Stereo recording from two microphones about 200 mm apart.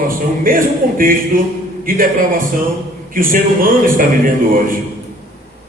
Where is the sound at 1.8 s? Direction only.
45° right (ahead or behind).